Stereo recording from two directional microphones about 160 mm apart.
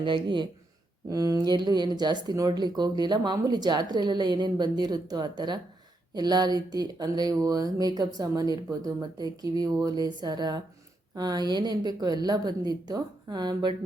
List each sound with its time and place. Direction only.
0.0 s speech: 30° right (ahead or behind)